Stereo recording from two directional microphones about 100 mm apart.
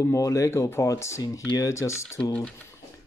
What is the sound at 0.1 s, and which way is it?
Speech, 30° left (ahead or behind).